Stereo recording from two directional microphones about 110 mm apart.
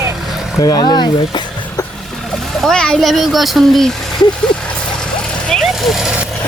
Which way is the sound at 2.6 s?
5° left (ahead or behind).